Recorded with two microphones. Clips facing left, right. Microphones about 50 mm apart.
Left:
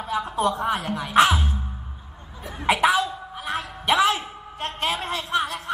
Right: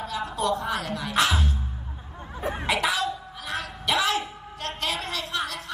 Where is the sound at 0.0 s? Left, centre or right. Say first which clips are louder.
Left 4 dB; left.